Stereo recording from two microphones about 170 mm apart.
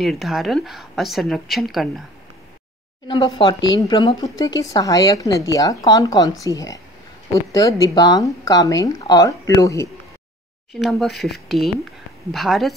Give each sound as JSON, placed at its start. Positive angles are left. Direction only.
{"t": 0.0, "sound": "a woman's voice", "side_deg": 0}
{"t": 3.1, "sound": "speech", "side_deg": 30}
{"t": 7.9, "sound": "speech", "side_deg": 20}
{"t": 10.7, "sound": "a woman's voice", "side_deg": 0}